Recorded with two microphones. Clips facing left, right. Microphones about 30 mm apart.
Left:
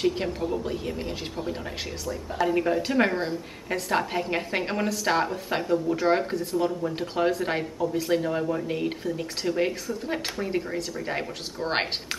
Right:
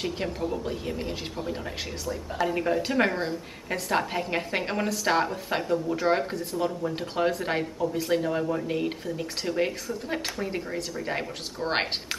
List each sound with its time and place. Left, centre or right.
0.0 s a woman's voice: centre